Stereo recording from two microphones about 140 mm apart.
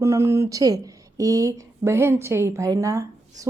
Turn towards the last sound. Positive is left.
turn(degrees=-25)  # may be behind; listen again after turning